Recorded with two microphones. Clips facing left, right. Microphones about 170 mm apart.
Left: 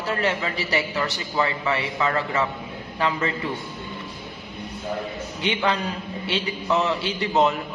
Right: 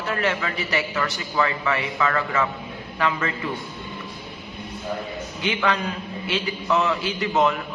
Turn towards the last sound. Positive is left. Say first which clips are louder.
# even
turn(degrees=30)  # may be behind; listen again after turning